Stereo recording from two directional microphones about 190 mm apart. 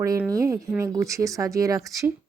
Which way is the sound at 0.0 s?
15° right (ahead or behind).